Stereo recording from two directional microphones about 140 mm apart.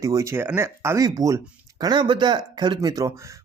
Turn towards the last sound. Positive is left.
turn(degrees=-25)  # may be behind; listen again after turning